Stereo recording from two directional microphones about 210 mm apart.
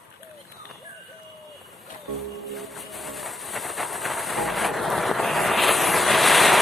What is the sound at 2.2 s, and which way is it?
Music, centre (ahead or behind).